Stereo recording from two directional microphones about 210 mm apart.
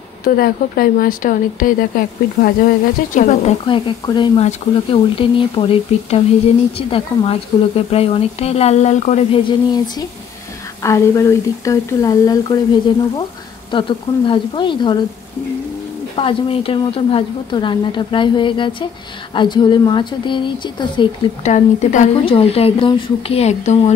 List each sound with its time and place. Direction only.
0.2 s speech: 45° left (ahead or behind)
3.6 s speech: 25° left (ahead or behind)
16.2 s speech: 25° left (ahead or behind)
21.5 s speech: 35° left (ahead or behind)